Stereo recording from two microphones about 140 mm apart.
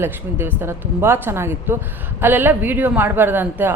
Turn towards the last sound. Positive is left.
turn(degrees=-15)  # may be behind; listen again after turning